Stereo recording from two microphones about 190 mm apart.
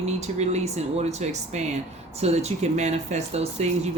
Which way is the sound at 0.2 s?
35° right (ahead or behind).